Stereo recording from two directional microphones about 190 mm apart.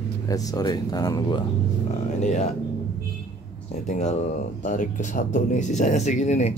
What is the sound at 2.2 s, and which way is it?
Speech, 35° left (ahead or behind).